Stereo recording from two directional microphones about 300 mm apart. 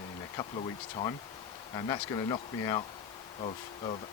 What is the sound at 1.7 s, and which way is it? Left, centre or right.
Speech, centre.